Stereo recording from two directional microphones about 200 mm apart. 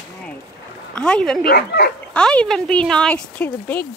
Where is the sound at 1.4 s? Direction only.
55° left (ahead or behind).